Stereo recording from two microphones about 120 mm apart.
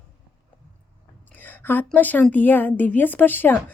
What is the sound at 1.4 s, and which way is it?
A woman's voice, 15° left (ahead or behind).